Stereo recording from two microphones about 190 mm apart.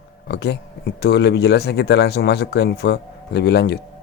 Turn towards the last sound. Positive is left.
turn(degrees=60)  # may be behind; listen again after turning